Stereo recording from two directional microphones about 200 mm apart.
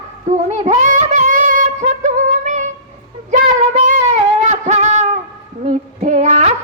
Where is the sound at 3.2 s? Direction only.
35° right (ahead or behind).